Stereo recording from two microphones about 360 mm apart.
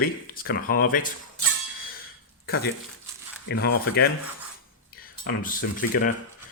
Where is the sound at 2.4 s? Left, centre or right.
Left.